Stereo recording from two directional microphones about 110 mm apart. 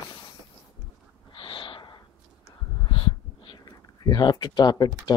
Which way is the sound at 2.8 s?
50° left (ahead or behind).